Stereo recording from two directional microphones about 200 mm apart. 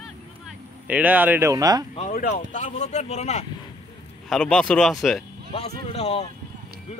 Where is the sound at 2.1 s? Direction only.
40° left (ahead or behind).